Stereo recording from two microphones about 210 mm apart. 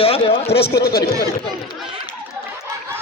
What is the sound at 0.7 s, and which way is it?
Speech, 50° left (ahead or behind).